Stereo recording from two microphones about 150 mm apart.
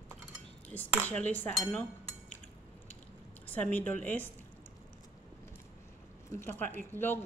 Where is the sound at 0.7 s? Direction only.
10° left (ahead or behind).